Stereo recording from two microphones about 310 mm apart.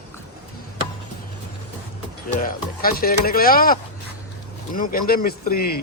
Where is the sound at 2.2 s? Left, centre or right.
Left.